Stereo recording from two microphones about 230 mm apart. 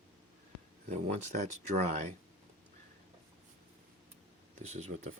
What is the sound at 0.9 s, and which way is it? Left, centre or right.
Speech, right.